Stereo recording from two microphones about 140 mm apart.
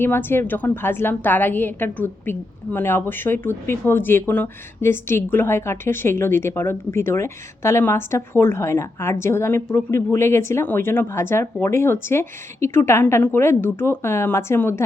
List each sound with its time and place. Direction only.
0.0 s a woman's voice: 15° left (ahead or behind)